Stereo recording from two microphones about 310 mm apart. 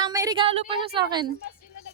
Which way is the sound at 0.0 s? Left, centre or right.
Centre.